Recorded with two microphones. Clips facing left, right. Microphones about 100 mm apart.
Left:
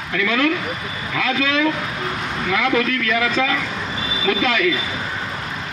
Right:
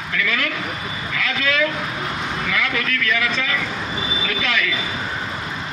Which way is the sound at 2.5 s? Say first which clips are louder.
Left 7 dB; 25° left (ahead or behind).